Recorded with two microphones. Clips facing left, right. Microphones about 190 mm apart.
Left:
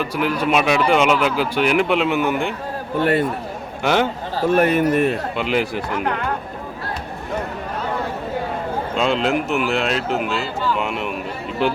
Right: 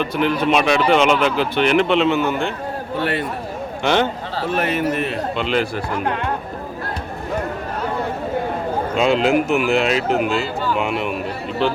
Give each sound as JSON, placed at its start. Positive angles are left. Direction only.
{"t": 0.0, "sound": "speech", "side_deg": 10}
{"t": 3.0, "sound": "a man's voice", "side_deg": 45}
{"t": 3.8, "sound": "speech", "side_deg": 5}
{"t": 4.4, "sound": "a man's voice", "side_deg": 50}
{"t": 5.4, "sound": "speech", "side_deg": 10}
{"t": 9.0, "sound": "speech", "side_deg": -5}